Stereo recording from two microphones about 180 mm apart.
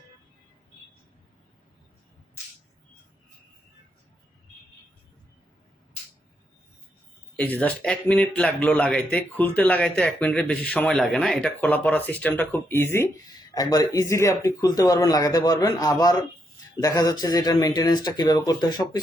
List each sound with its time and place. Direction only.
7.3 s speech: 10° left (ahead or behind)